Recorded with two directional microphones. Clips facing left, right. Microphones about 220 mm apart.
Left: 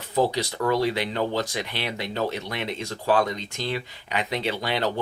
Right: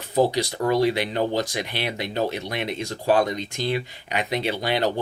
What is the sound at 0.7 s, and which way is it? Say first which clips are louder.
Speech: right 3 dB; 15° right (ahead or behind).